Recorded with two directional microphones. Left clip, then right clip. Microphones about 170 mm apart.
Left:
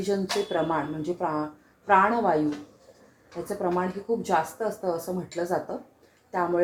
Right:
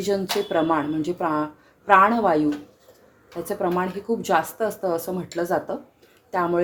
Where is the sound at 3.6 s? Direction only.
55° right (ahead or behind).